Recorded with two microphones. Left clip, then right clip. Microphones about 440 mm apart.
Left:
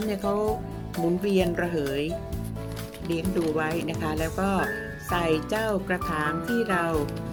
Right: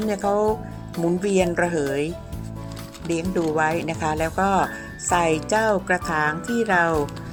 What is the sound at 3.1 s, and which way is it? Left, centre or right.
Speech, centre.